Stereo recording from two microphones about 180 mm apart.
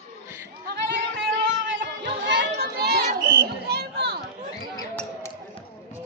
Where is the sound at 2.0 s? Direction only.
80° right; by 3.0 s 65° right (ahead or behind).